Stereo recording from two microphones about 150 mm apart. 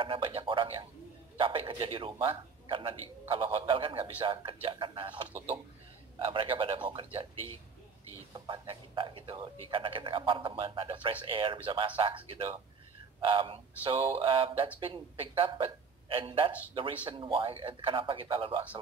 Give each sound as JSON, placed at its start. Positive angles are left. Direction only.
{"t": 0.0, "sound": "a man's voice", "side_deg": -35}
{"t": 8.3, "sound": "a man's voice", "side_deg": -35}